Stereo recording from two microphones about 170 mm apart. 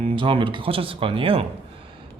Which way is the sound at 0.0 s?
30° right (ahead or behind).